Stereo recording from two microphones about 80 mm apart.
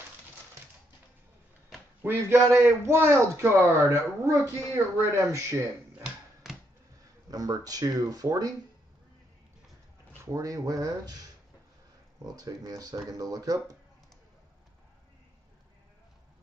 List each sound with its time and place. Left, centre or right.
2.2 s a man's voice: right
6.4 s a sound: centre
7.2 s speech: right
10.2 s speech: right